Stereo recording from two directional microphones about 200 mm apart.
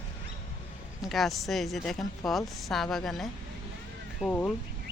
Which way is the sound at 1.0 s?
Centre (ahead or behind).